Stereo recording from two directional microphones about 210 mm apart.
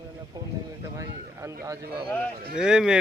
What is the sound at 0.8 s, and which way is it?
Speech, 15° right (ahead or behind).